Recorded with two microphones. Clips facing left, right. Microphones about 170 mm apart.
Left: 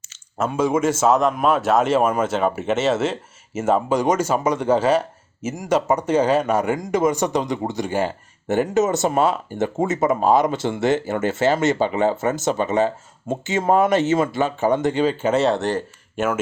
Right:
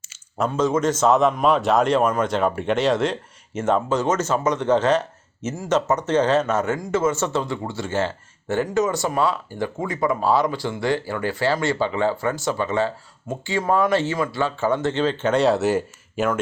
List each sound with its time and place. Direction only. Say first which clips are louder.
0.3 s a man's voice: left 1 dB; 5° left (ahead or behind)